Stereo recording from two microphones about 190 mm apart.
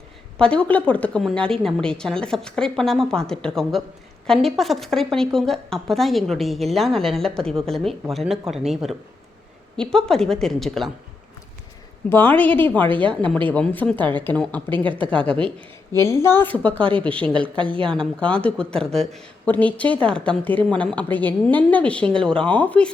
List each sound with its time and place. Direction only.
0.3 s a woman's voice: 5° left (ahead or behind)
12.0 s a woman's voice: 10° left (ahead or behind)
17.6 s speech: 25° right (ahead or behind)
17.9 s a woman's voice: 5° left (ahead or behind)